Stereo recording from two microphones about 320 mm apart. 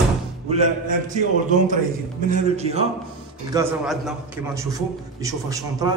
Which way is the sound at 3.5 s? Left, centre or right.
Centre.